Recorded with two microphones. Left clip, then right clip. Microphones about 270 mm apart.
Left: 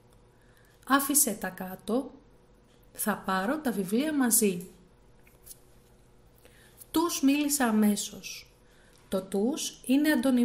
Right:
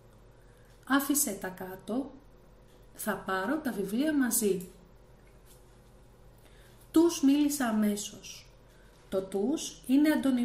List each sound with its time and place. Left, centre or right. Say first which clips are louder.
0.8 s a woman's voice: left 3 dB; left
6.9 s a woman's voice: right 2 dB; left